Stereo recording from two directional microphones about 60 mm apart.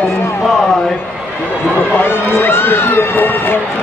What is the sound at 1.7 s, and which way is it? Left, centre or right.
Speech, left.